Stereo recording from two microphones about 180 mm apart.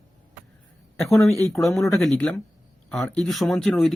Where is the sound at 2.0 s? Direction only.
5° left (ahead or behind).